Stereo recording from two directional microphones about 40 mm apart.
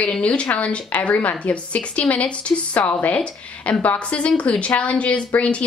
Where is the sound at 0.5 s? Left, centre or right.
Left.